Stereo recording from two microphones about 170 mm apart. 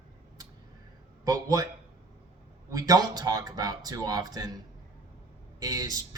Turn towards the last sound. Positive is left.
turn(degrees=-20)  # may be behind; listen again after turning